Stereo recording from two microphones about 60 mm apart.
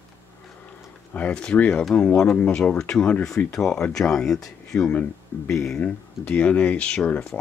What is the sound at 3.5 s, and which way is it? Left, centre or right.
Speech, centre.